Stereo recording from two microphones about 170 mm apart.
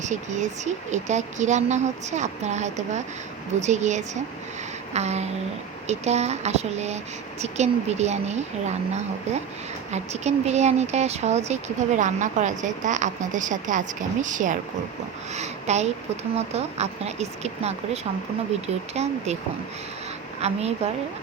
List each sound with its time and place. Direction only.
0.0 s a woman's voice: 45° right (ahead or behind)
20.4 s speech: 40° right (ahead or behind)